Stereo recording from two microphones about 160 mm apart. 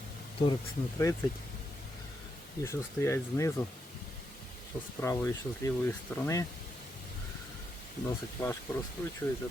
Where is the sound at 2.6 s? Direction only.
15° left (ahead or behind).